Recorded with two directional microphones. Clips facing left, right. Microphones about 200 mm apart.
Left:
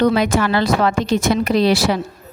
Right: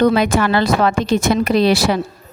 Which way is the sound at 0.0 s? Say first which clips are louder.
Right 1 dB; 55° right (ahead or behind).